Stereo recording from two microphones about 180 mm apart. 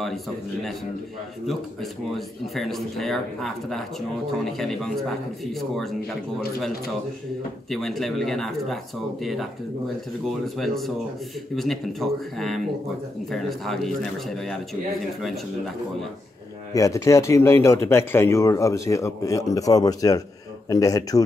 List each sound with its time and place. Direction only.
1.5 s speech: centre (ahead or behind)
7.7 s speech: centre (ahead or behind)
16.7 s speech: 20° left (ahead or behind)